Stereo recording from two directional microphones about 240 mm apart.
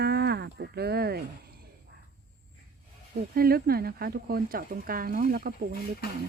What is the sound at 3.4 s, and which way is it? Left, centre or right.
Speech, right.